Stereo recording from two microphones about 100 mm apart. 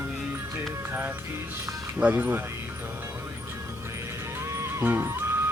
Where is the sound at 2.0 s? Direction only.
15° right (ahead or behind).